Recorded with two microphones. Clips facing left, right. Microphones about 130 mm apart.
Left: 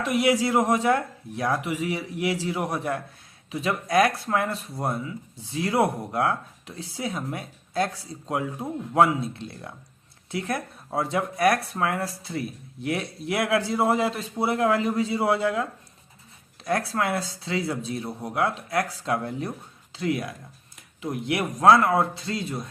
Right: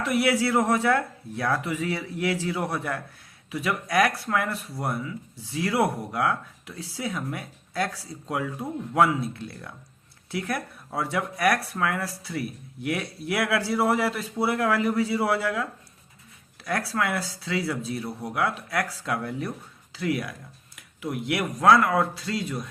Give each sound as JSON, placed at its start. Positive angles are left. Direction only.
{"t": 0.0, "sound": "speech", "side_deg": 20}